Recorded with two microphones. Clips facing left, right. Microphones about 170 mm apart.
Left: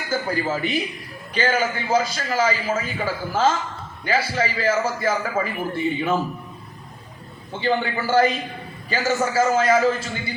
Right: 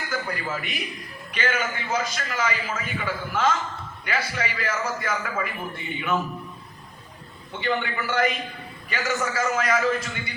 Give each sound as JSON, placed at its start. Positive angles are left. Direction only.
{"t": 0.1, "sound": "a man's voice", "side_deg": 30}
{"t": 7.6, "sound": "a man's voice", "side_deg": 30}